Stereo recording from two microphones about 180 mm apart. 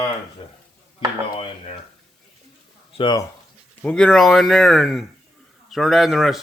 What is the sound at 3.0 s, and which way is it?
Speech, 25° left (ahead or behind).